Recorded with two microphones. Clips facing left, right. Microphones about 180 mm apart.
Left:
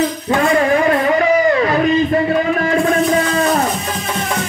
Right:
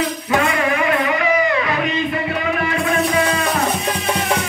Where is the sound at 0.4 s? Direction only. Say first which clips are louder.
Left 7 dB; 35° left (ahead or behind).